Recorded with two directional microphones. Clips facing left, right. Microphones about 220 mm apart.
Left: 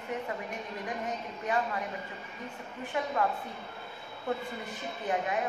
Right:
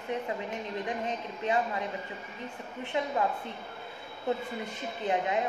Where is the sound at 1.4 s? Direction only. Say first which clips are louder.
Right 2 dB; 20° right (ahead or behind).